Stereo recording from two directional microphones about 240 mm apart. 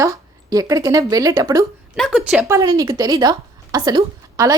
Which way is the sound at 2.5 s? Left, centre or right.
Centre.